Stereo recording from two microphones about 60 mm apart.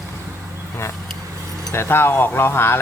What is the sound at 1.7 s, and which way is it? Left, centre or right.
Speech, left.